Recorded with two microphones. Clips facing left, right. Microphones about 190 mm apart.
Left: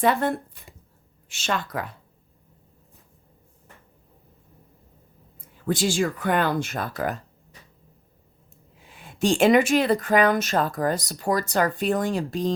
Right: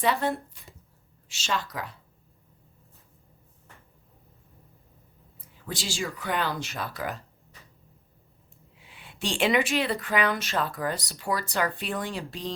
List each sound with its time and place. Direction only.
0.0 s speech: 50° left (ahead or behind)
5.6 s speech: 55° left (ahead or behind)
8.8 s speech: 45° left (ahead or behind)